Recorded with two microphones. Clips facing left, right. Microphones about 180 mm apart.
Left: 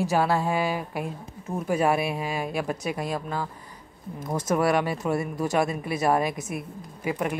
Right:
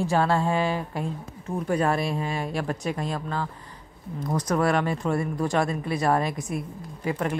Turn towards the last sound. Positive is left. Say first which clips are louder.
# even
turn(degrees=20)  # may be behind; listen again after turning